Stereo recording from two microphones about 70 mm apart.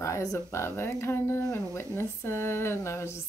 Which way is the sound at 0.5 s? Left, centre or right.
Left.